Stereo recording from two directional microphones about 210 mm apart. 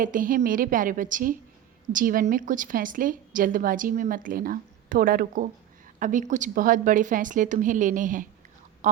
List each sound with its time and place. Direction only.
0.0 s speech: 40° right (ahead or behind)